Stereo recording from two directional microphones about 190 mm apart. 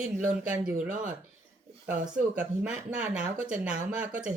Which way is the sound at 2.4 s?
5° right (ahead or behind).